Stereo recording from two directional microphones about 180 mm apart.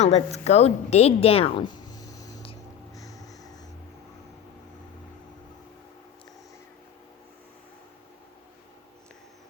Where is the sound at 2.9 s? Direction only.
20° left (ahead or behind).